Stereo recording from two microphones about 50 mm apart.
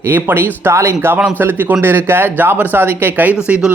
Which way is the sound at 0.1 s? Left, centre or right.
Right.